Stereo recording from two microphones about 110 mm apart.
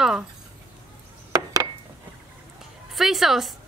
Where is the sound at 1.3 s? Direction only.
35° right (ahead or behind).